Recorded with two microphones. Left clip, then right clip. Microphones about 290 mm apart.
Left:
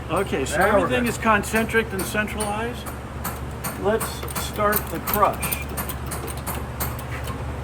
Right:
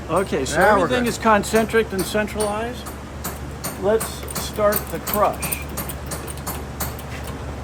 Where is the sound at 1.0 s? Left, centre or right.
Right.